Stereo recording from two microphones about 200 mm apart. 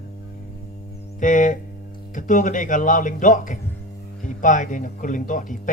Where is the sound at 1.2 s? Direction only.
40° left (ahead or behind).